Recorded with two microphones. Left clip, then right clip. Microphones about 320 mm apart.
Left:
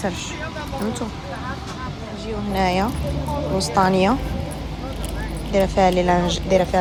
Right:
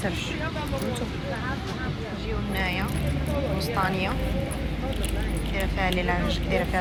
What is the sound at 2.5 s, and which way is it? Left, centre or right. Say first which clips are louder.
Speech: left 9 dB; centre.